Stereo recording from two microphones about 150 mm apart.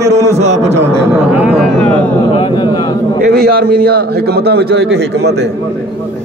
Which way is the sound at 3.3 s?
90° right.